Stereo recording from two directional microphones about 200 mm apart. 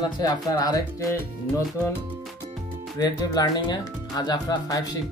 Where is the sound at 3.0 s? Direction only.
20° left (ahead or behind).